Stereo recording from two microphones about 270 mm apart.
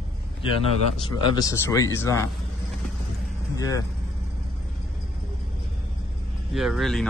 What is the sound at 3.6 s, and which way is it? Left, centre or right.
Speech, centre.